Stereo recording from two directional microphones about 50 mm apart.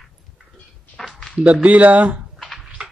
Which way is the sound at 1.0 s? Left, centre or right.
Centre.